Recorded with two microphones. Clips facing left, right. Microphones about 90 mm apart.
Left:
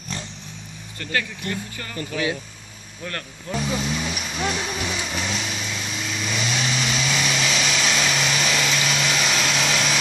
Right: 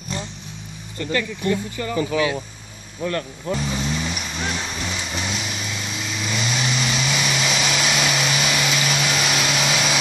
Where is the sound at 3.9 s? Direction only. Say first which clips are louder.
Right 1 dB; centre (ahead or behind).